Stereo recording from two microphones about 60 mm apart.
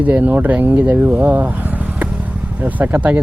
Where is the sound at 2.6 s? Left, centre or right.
Right.